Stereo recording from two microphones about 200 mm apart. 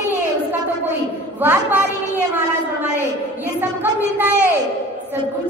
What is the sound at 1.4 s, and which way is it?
A woman's voice, 10° right (ahead or behind).